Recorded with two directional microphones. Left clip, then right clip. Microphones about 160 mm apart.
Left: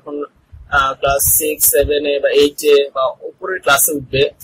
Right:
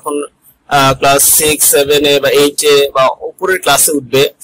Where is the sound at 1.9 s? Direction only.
35° right (ahead or behind).